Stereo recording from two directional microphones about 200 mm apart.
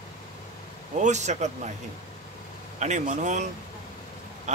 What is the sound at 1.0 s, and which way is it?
Speech, 35° right (ahead or behind).